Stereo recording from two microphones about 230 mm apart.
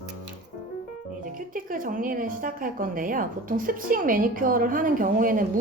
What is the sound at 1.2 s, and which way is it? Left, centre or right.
Speech, right.